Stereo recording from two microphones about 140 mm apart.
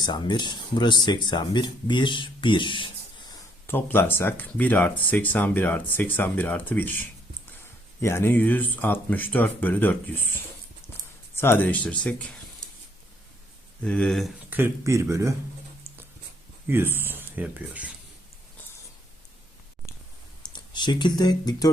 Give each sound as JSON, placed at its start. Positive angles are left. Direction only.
{"t": 0.0, "sound": "speech", "side_deg": 30}
{"t": 3.7, "sound": "speech", "side_deg": 15}
{"t": 13.8, "sound": "speech", "side_deg": 5}
{"t": 14.5, "sound": "speech", "side_deg": -20}
{"t": 16.6, "sound": "speech", "side_deg": -15}
{"t": 20.4, "sound": "speech", "side_deg": 30}